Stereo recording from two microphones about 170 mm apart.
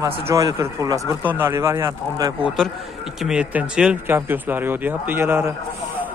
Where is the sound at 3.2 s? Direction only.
5° right (ahead or behind).